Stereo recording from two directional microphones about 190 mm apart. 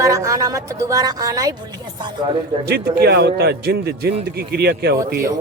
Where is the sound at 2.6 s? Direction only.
55° right (ahead or behind).